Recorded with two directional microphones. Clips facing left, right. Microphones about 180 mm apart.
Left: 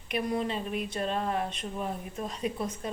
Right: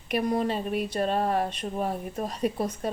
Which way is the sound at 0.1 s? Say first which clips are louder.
Right 4 dB; 45° right (ahead or behind).